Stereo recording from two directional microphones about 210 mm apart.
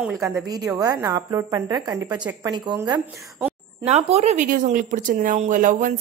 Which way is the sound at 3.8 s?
30° right (ahead or behind).